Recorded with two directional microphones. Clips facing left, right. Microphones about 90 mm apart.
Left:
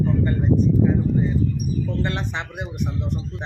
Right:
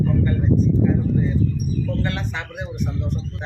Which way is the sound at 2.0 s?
25° left (ahead or behind).